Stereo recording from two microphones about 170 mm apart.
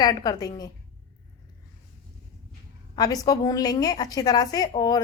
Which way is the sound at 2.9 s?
20° left (ahead or behind).